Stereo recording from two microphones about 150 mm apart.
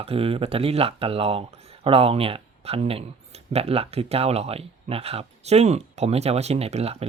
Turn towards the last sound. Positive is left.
turn(degrees=-45)  # may be behind; listen again after turning